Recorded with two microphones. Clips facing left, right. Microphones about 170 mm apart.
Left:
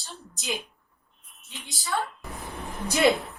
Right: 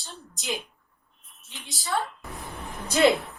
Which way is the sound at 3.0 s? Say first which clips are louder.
Right 2 dB; centre (ahead or behind).